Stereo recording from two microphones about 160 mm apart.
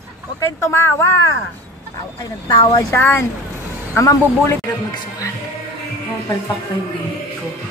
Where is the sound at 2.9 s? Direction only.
15° left (ahead or behind).